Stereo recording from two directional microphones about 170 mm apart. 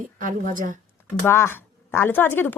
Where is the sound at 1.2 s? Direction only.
15° left (ahead or behind).